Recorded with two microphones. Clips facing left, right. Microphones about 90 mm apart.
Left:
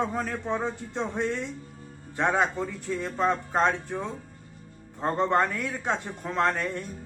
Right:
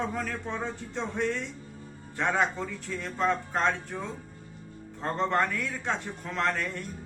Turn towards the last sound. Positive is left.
turn(degrees=20)  # may be behind; listen again after turning